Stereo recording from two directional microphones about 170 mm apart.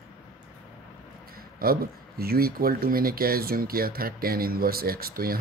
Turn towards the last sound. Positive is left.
turn(degrees=-60)  # may be behind; listen again after turning